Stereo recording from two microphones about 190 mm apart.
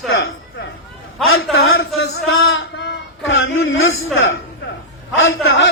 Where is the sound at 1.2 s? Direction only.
90° left.